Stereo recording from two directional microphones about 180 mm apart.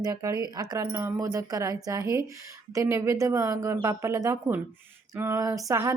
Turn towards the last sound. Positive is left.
turn(degrees=-15)  # may be behind; listen again after turning